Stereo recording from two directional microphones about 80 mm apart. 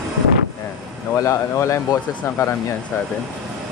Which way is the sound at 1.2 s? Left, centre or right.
Left.